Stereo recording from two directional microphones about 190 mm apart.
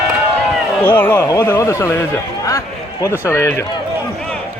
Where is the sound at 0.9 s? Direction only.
10° left (ahead or behind).